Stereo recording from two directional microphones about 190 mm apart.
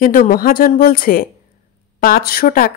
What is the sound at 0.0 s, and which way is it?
Speech, 50° left (ahead or behind).